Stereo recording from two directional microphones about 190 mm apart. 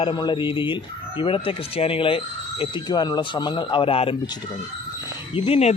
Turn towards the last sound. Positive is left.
turn(degrees=35)  # may be behind; listen again after turning